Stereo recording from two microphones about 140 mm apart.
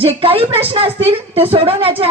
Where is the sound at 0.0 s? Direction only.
40° right (ahead or behind).